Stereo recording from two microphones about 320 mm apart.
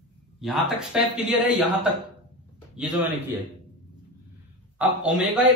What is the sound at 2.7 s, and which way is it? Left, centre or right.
Speech, centre.